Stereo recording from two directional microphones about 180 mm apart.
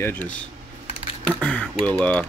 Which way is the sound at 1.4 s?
5° left (ahead or behind).